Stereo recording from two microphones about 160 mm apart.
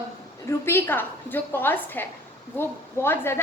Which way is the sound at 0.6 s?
15° left (ahead or behind).